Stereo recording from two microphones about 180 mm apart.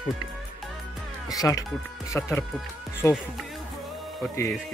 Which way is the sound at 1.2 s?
20° left (ahead or behind).